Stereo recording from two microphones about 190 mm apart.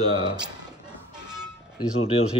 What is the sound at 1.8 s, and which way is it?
Speech, 30° left (ahead or behind).